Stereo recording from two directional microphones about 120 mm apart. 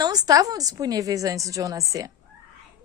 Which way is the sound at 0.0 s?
35° right (ahead or behind).